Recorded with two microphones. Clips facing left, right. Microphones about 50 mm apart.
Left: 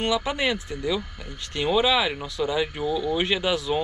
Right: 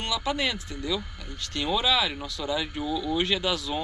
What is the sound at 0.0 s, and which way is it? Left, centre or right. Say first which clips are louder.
Speech: left 4 dB; left.